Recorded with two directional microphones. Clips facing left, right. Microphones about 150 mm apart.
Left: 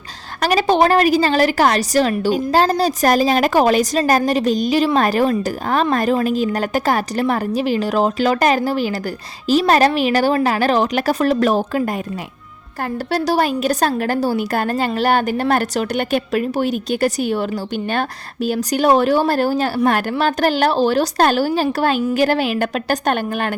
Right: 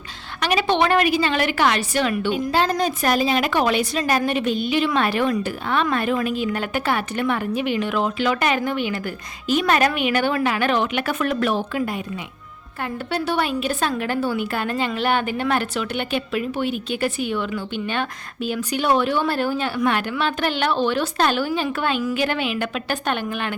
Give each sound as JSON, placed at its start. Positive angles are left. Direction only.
{"t": 0.3, "sound": "a woman's voice", "side_deg": 40}